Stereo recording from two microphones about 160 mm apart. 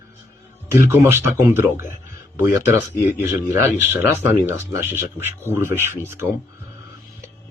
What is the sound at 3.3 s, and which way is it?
Speech, 15° right (ahead or behind).